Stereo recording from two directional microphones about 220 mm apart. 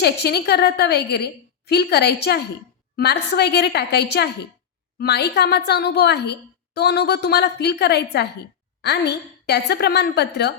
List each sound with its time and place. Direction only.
0.0 s a woman's voice: 50° left (ahead or behind)